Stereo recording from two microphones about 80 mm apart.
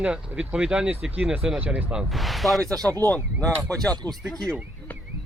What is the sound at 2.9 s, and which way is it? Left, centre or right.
Speech, left.